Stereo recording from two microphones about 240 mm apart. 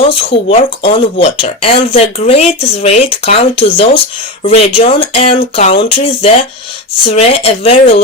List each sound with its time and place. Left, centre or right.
0.1 s speech: left